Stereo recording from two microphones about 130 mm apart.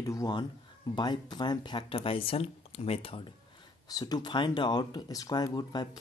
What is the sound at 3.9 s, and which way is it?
Speech, 30° left (ahead or behind).